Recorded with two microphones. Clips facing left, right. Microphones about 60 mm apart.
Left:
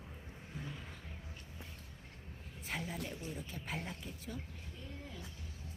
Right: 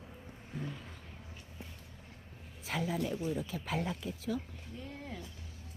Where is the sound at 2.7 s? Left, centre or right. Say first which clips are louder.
Right 5 dB; right.